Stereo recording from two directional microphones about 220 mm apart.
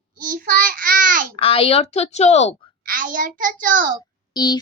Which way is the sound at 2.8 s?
35° right (ahead or behind).